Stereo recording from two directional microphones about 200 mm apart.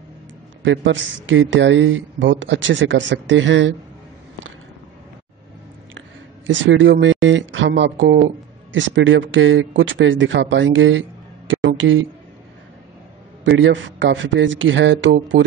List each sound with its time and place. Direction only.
0.7 s speech: 70° right (ahead or behind)
5.9 s speech: 70° right (ahead or behind)
13.4 s a man's voice: 65° right (ahead or behind)